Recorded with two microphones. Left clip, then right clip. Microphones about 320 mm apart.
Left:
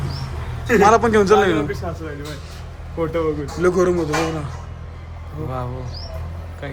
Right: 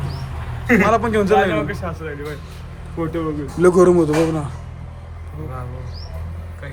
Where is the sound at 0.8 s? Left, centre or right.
Centre.